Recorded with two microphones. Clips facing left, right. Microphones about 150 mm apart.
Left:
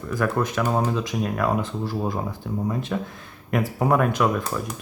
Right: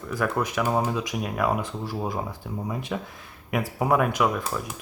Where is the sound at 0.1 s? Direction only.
5° right (ahead or behind).